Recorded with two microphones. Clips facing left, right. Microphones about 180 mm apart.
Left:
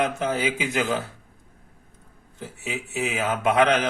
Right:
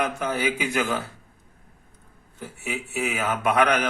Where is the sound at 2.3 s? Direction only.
20° left (ahead or behind).